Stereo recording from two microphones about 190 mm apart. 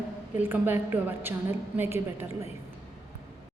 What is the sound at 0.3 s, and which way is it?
A woman's voice, 10° right (ahead or behind).